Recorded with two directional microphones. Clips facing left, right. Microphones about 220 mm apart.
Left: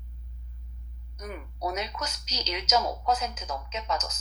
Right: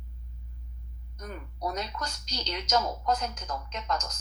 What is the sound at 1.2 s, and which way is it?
A woman's voice, 10° left (ahead or behind).